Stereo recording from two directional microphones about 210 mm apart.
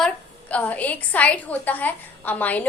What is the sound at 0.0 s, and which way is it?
A woman's voice, 5° left (ahead or behind).